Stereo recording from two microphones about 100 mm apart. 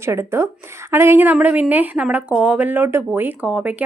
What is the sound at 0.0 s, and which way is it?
A woman's voice, 25° right (ahead or behind).